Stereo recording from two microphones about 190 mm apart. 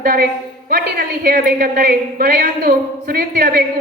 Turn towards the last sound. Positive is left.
turn(degrees=-50)  # may be behind; listen again after turning